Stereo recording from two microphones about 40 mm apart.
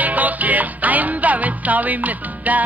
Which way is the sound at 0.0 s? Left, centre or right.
Right.